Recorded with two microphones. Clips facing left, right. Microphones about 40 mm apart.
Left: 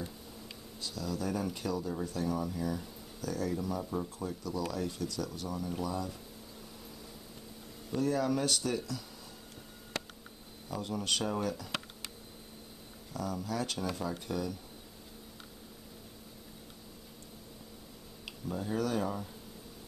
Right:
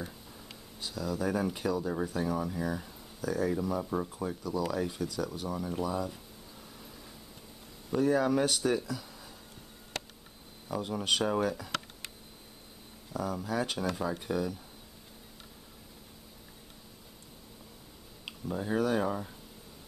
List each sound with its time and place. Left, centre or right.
0.7 s speech: centre
3.9 s speech: right
4.3 s speech: centre
7.9 s speech: centre
10.7 s speech: centre
13.1 s speech: centre
18.2 s speech: centre